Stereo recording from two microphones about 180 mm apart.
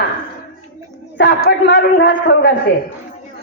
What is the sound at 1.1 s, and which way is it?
A woman's voice, 65° left (ahead or behind).